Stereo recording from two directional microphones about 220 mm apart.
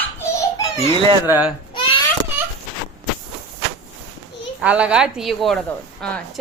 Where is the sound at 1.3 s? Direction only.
5° right (ahead or behind).